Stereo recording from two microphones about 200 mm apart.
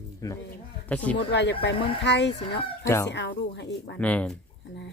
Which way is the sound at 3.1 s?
60° left (ahead or behind).